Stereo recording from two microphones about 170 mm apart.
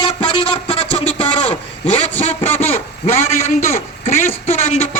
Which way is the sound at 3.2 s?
40° left (ahead or behind).